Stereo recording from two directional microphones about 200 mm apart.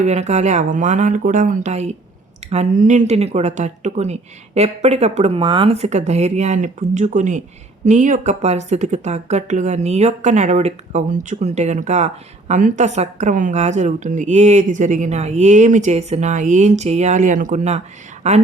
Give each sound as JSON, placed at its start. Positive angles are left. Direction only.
{"t": 0.0, "sound": "speech", "side_deg": -35}